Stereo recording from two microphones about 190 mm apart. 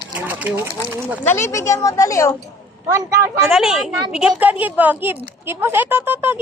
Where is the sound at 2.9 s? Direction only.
15° right (ahead or behind).